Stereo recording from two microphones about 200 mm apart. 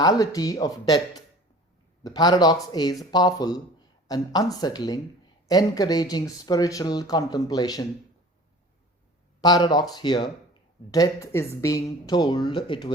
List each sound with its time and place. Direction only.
0.0 s speech: 20° left (ahead or behind)
9.4 s a woman's voice: 20° left (ahead or behind)